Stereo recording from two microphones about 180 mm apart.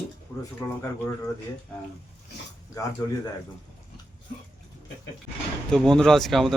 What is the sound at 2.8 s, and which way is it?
Speech, 20° left (ahead or behind).